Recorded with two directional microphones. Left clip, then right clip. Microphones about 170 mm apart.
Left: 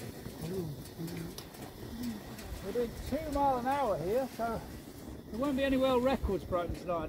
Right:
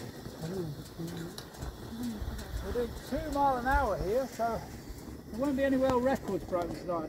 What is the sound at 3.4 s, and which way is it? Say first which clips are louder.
Speech: right 2 dB; 10° right (ahead or behind).